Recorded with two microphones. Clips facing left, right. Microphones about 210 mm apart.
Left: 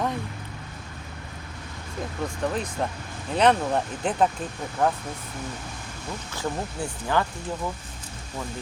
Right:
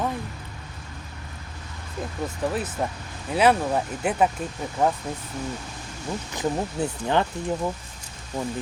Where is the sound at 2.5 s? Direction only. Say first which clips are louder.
Right 1 dB; 5° right (ahead or behind).